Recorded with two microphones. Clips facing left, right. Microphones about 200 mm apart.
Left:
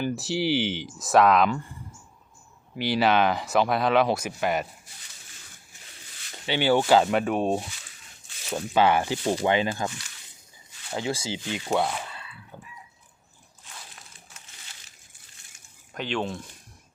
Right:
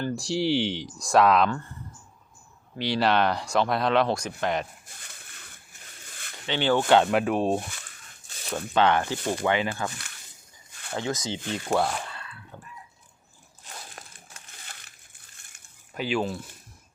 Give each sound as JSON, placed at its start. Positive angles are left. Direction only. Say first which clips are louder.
{"t": 0.0, "sound": "speech", "louder": "even", "side_deg": 5}
{"t": 1.5, "sound": "speech", "louder": "left 2 dB", "side_deg": 10}
{"t": 4.9, "sound": "a sound", "louder": "right 3 dB", "side_deg": -55}
{"t": 6.5, "sound": "speech", "louder": "left 1 dB", "side_deg": 10}
{"t": 7.6, "sound": "speech", "louder": "right 1 dB", "side_deg": -55}
{"t": 8.5, "sound": "speech", "louder": "left 1 dB", "side_deg": 10}
{"t": 9.4, "sound": "speech", "louder": "even", "side_deg": 25}
{"t": 10.7, "sound": "a sound", "louder": "right 2 dB", "side_deg": -55}
{"t": 11.5, "sound": "speech", "louder": "even", "side_deg": 0}
{"t": 13.7, "sound": "a sound", "louder": "right 4 dB", "side_deg": -50}
{"t": 16.0, "sound": "speech", "louder": "right 2 dB", "side_deg": -5}